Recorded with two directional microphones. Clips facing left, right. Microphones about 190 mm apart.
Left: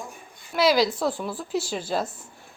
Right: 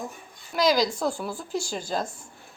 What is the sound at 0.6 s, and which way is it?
A woman's voice, 5° left (ahead or behind).